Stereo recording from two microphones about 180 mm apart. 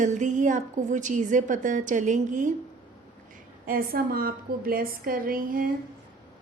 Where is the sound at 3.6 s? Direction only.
55° right (ahead or behind).